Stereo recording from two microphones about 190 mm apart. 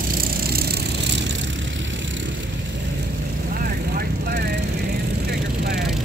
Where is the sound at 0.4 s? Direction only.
55° right (ahead or behind).